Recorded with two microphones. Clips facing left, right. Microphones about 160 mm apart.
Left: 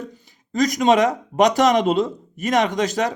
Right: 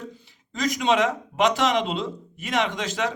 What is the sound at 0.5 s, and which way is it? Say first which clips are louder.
Speech: left 6 dB; 45° left (ahead or behind).